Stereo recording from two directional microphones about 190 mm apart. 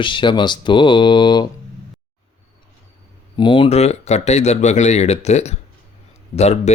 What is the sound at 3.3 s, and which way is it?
Speech, 25° left (ahead or behind).